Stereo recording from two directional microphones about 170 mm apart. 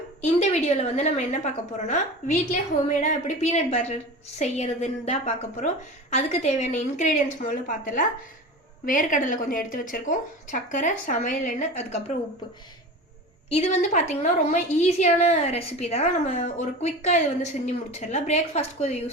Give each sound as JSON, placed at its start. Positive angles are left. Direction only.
{"t": 0.2, "sound": "a woman's voice", "side_deg": 40}
{"t": 13.5, "sound": "a woman's voice", "side_deg": 40}